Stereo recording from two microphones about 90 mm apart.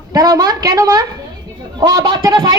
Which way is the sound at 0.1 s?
45° right (ahead or behind).